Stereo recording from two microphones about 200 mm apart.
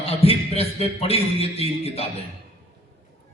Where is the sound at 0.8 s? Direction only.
30° left (ahead or behind).